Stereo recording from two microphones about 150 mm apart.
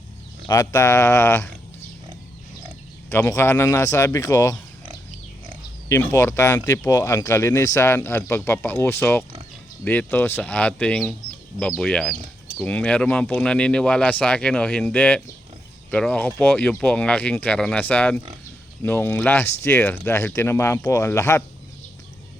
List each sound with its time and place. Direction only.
0.4 s speech: 20° left (ahead or behind)
3.1 s speech: 15° left (ahead or behind)
5.9 s speech: 15° left (ahead or behind)